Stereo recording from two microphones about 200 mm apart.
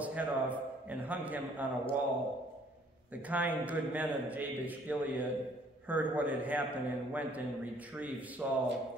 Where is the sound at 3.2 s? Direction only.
10° right (ahead or behind).